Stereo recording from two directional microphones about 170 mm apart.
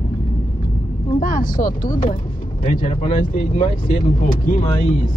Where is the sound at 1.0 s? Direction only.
55° left (ahead or behind).